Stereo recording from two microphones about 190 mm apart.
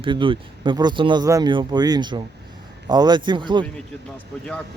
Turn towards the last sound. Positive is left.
turn(degrees=-25)  # may be behind; listen again after turning